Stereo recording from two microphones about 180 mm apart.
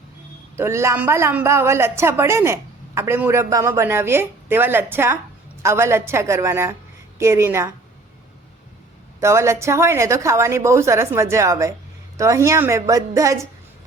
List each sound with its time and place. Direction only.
0.5 s a woman's voice: 15° right (ahead or behind)
9.2 s a woman's voice: 15° right (ahead or behind)